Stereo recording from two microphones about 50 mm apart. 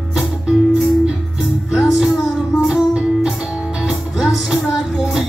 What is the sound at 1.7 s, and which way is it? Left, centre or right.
Music, centre.